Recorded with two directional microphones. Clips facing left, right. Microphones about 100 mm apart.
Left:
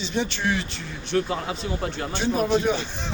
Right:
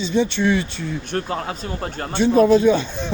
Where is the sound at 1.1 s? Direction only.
45° right (ahead or behind).